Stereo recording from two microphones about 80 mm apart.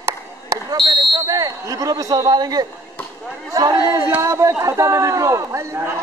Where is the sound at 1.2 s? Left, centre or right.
Right.